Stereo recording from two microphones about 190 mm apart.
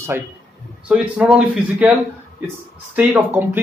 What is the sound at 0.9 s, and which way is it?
Speech, 5° right (ahead or behind).